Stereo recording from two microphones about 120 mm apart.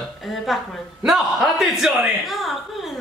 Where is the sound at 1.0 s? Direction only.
Centre (ahead or behind).